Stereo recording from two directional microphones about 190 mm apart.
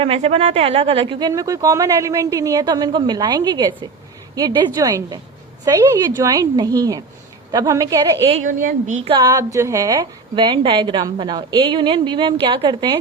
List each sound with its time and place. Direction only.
0.0 s a woman's voice: 30° right (ahead or behind)
8.3 s a woman's voice: 45° right (ahead or behind)
9.0 s a woman's voice: 20° right (ahead or behind)